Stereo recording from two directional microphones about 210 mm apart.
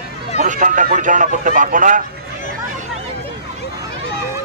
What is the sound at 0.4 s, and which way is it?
Speech, 40° right (ahead or behind).